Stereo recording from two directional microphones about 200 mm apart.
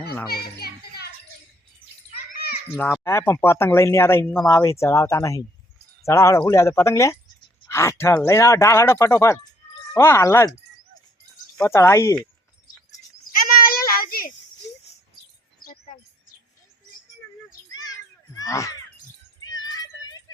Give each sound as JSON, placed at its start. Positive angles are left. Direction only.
{"t": 0.3, "sound": "children playing", "side_deg": 50}
{"t": 2.1, "sound": "children playing", "side_deg": 50}
{"t": 2.7, "sound": "speech", "side_deg": 10}
{"t": 11.5, "sound": "speech", "side_deg": 15}
{"t": 13.3, "sound": "children playing", "side_deg": 45}
{"t": 17.7, "sound": "children playing", "side_deg": 20}
{"t": 18.3, "sound": "speech", "side_deg": 15}
{"t": 19.6, "sound": "a sound", "side_deg": 20}